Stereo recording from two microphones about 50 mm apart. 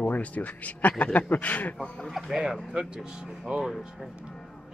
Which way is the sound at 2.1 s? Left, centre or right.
Centre.